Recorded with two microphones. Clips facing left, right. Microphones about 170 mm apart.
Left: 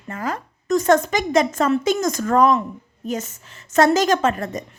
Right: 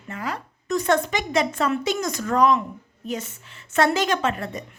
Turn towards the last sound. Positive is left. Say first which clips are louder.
# left 4 dB
turn(degrees=45)  # may be behind; listen again after turning